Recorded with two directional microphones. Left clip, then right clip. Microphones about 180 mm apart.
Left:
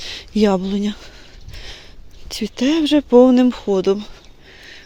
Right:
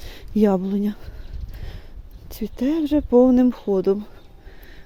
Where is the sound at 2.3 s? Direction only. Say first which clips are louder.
Left 5 dB; centre (ahead or behind).